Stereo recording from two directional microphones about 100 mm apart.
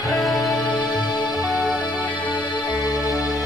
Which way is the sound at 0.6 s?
10° left (ahead or behind).